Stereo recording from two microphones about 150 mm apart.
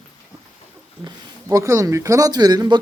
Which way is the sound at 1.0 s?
20° right (ahead or behind).